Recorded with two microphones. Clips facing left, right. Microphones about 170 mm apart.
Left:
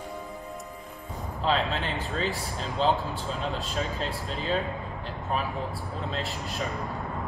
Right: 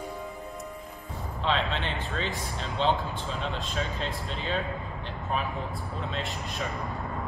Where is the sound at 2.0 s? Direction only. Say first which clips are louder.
Left 2 dB; 40° left (ahead or behind).